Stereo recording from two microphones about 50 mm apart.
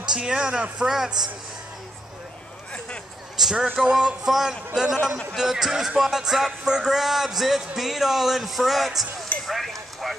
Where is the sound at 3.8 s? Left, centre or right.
Centre.